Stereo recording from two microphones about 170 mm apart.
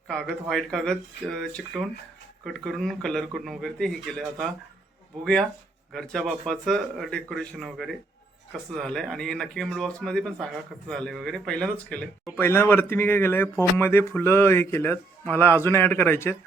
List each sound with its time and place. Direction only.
0.1 s speech: 5° left (ahead or behind)